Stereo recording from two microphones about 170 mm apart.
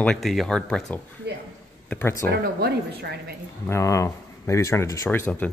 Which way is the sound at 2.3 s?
75° right (ahead or behind).